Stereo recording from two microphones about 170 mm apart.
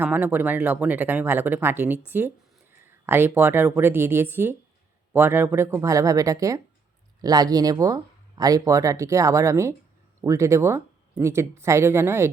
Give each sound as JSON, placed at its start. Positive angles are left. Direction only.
{"t": 0.0, "sound": "speech", "side_deg": -10}